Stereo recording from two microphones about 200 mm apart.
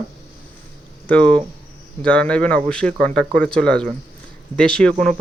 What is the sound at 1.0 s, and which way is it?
Speech, 5° left (ahead or behind).